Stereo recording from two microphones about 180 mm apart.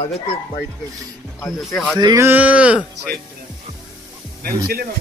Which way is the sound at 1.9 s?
20° right (ahead or behind).